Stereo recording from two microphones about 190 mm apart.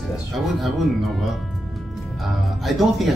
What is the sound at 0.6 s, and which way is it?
Speech, centre (ahead or behind).